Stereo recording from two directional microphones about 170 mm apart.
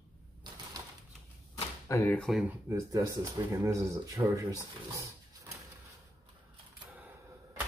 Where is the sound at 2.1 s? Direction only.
5° left (ahead or behind).